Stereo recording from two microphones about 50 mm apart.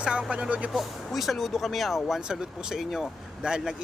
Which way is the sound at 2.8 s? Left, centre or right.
Centre.